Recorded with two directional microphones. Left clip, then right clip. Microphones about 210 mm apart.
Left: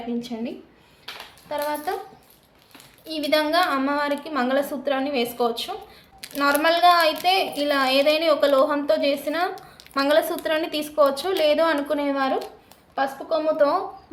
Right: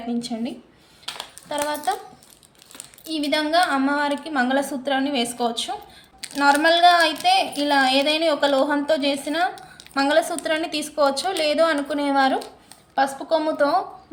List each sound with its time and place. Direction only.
0.2 s a woman's voice: centre (ahead or behind)
1.1 s a sound: 55° right (ahead or behind)
1.5 s a woman's voice: centre (ahead or behind)
3.1 s a woman's voice: 15° left (ahead or behind)